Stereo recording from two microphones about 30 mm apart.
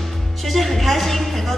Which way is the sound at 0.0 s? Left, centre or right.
Centre.